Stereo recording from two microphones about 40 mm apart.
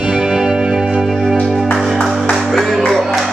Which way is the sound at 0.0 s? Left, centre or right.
Right.